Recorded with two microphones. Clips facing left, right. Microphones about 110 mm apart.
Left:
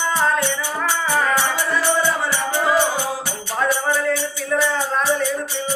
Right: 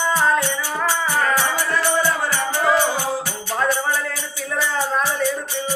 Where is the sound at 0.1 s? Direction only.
5° right (ahead or behind).